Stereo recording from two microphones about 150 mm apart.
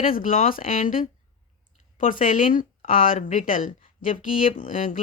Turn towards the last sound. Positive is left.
turn(degrees=65)  # may be behind; listen again after turning